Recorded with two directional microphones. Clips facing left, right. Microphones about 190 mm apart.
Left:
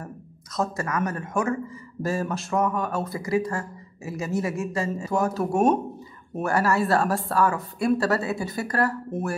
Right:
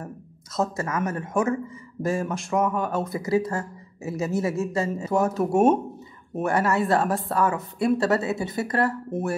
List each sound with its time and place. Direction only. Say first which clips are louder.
0.0 s speech: right 1 dB; 25° right (ahead or behind)